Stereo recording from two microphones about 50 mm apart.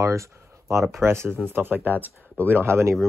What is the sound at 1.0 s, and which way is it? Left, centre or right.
Speech, right.